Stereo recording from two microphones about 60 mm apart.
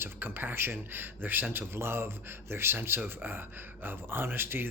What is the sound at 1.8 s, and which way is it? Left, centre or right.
A man's voice, right.